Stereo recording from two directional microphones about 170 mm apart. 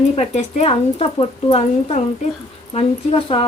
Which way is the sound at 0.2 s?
40° left (ahead or behind).